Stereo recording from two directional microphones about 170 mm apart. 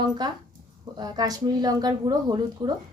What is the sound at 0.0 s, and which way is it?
Speech, 25° right (ahead or behind).